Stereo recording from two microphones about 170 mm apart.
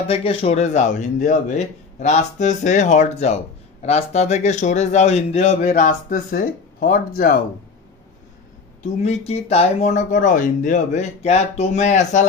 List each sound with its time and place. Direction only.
0.0 s a man's voice: 35° left (ahead or behind); by 7.3 s 55° left (ahead or behind)
9.0 s a man's voice: 40° left (ahead or behind)